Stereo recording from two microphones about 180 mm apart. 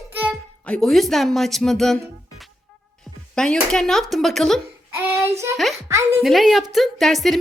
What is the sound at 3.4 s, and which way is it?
A woman's voice, 5° left (ahead or behind).